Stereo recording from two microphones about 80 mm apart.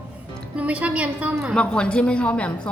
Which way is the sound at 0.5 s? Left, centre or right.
Centre.